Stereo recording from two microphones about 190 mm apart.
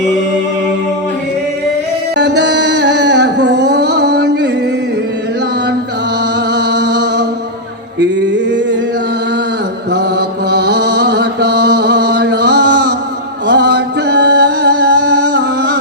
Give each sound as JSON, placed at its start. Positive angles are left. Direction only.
{"t": 2.1, "sound": "music", "side_deg": -65}
{"t": 6.5, "sound": "chant", "side_deg": -65}
{"t": 7.9, "sound": "a sound", "side_deg": -65}
{"t": 9.9, "sound": "mantra", "side_deg": -60}
{"t": 13.5, "sound": "music", "side_deg": -60}